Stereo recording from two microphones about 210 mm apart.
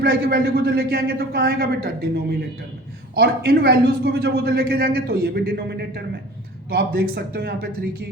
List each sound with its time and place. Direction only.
0.0 s a man's voice: 45° right (ahead or behind)